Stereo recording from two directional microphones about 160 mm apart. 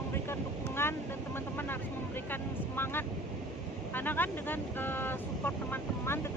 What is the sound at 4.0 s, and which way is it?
Speech, 10° left (ahead or behind).